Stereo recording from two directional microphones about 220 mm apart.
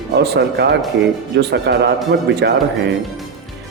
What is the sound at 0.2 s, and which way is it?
Speech, 50° right (ahead or behind).